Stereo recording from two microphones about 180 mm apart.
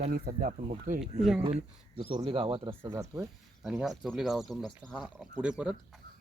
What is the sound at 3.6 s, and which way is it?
Speech, 5° right (ahead or behind).